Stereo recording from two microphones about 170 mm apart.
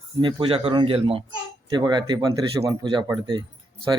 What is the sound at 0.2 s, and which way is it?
A man's voice, 30° right (ahead or behind).